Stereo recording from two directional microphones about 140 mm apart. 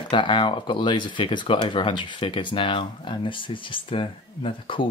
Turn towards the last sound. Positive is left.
turn(degrees=40)  # may be behind; listen again after turning